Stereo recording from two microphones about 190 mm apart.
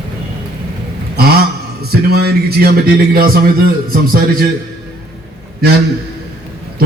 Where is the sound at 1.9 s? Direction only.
55° right (ahead or behind).